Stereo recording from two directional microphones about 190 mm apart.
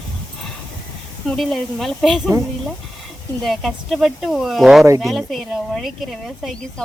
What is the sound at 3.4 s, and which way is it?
Speech, centre (ahead or behind).